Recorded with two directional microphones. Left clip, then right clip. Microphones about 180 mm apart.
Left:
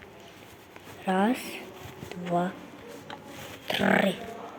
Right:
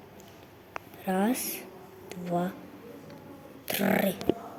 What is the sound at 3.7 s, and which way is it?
Music, 15° right (ahead or behind).